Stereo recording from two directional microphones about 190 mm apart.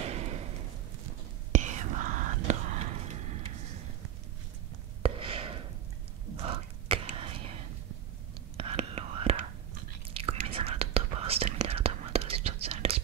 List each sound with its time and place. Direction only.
0.1 s thump: 35° right (ahead or behind)
1.5 s whispering: 40° right (ahead or behind)
5.0 s a sound: 30° right (ahead or behind)
6.4 s whispering: 30° right (ahead or behind)